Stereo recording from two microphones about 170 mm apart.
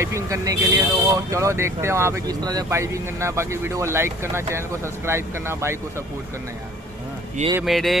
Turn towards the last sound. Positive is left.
turn(degrees=0)  # may be behind; listen again after turning